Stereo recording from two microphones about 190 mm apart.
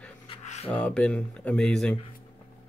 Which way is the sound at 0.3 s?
35° left (ahead or behind).